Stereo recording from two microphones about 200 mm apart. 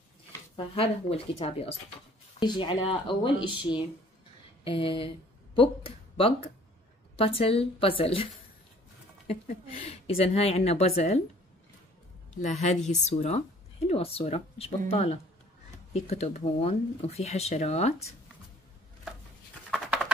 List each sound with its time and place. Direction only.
0.7 s speech: 30° left (ahead or behind)
9.3 s speech: 30° left (ahead or behind)
12.4 s speech: 35° left (ahead or behind)
19.7 s a sound: centre (ahead or behind)